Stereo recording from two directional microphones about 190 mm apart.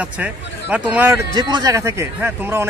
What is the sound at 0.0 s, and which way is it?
Speech, 5° right (ahead or behind).